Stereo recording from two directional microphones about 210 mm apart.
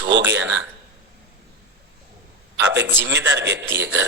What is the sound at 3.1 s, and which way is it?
Speech, 60° right (ahead or behind).